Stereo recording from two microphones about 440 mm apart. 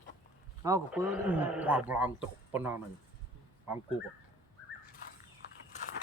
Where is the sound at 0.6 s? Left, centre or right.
Centre.